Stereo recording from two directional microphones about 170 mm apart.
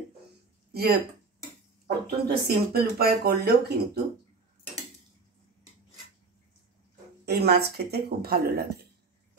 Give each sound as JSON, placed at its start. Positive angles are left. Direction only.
{"t": 1.9, "sound": "speech", "side_deg": -65}
{"t": 7.2, "sound": "speech", "side_deg": -70}